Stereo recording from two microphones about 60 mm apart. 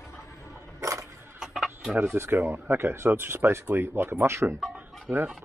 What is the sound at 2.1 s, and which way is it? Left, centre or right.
Speech, right.